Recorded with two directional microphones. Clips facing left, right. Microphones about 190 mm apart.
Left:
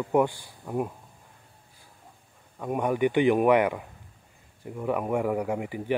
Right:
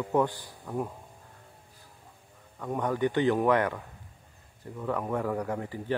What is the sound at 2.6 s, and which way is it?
Speech, 10° left (ahead or behind).